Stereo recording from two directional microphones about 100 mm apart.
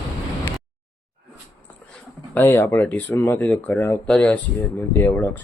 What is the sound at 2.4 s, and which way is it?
Speech, 25° left (ahead or behind).